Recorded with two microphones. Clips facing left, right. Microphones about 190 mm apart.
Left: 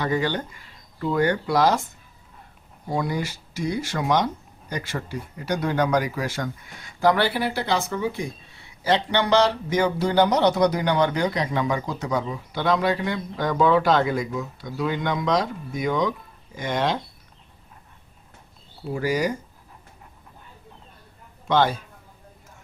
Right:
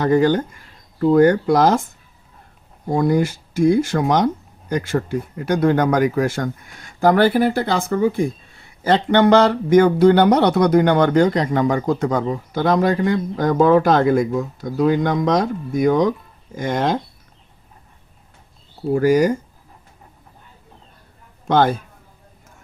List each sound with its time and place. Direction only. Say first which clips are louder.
0.0 s speech: right 9 dB; 45° right (ahead or behind)
2.9 s speech: right 9 dB; 50° right (ahead or behind)
18.9 s speech: right 9 dB; 50° right (ahead or behind)
21.4 s a man's voice: right 4 dB; 50° right (ahead or behind)